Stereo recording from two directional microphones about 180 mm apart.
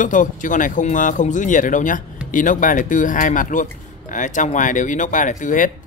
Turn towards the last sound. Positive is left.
turn(degrees=45)  # may be behind; listen again after turning